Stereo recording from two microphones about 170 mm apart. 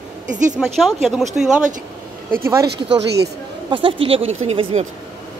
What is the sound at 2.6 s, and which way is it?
Speech, 75° right (ahead or behind).